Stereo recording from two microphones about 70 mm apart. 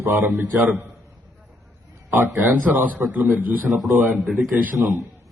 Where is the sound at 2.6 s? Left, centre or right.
Right.